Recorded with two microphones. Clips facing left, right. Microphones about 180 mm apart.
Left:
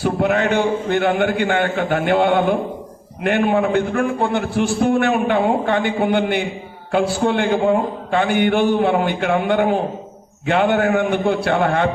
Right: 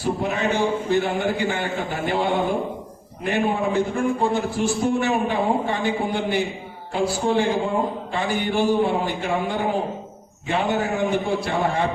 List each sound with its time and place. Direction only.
0.0 s a man's voice: 65° left (ahead or behind)